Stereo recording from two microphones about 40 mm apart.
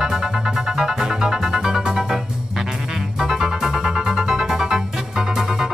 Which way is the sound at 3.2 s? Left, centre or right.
Centre.